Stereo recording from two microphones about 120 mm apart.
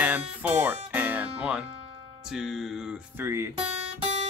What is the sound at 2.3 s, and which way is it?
Music, centre (ahead or behind).